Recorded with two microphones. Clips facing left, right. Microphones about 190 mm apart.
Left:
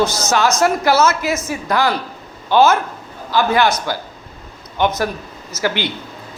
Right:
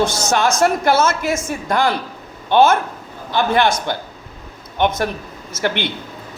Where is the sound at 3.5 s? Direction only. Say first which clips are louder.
Right 1 dB; 55° right (ahead or behind).